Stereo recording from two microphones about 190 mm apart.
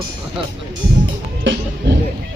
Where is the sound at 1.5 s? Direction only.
90° right.